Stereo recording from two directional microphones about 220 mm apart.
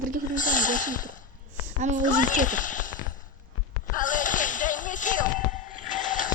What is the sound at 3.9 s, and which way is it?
Whip, 35° left (ahead or behind).